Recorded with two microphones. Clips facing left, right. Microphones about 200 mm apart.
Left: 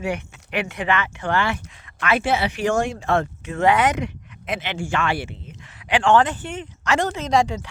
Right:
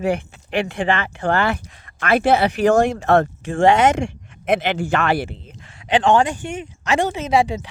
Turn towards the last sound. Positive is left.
turn(degrees=-15)  # may be behind; listen again after turning